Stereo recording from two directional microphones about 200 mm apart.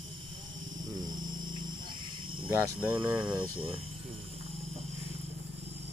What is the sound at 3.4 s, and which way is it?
Speech, 25° right (ahead or behind).